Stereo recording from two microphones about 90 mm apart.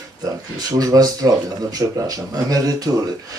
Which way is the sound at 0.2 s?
45° right (ahead or behind).